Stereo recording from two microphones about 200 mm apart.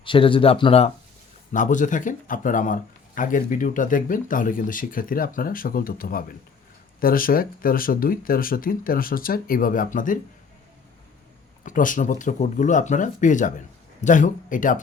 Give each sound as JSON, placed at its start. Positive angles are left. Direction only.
{"t": 0.0, "sound": "speech", "side_deg": 25}
{"t": 1.5, "sound": "a man's voice", "side_deg": 40}
{"t": 11.6, "sound": "speech", "side_deg": 40}